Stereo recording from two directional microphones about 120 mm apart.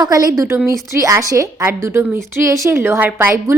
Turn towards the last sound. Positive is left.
turn(degrees=-15)  # may be behind; listen again after turning